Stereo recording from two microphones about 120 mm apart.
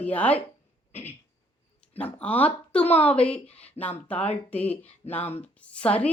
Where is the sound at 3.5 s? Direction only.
60° left (ahead or behind).